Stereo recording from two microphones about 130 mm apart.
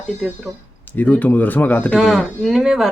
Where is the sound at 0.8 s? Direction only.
10° left (ahead or behind).